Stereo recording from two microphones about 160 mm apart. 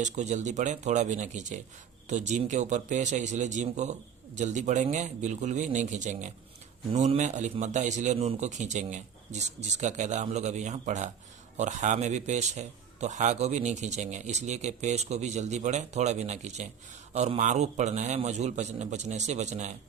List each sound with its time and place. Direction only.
0.0 s a man's voice: 50° right (ahead or behind)